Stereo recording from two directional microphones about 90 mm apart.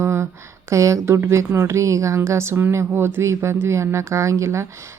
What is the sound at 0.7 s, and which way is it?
A woman's voice, 35° right (ahead or behind).